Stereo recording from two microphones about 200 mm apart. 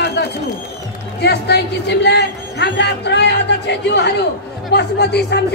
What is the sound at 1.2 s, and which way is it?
A man's voice, 55° left (ahead or behind).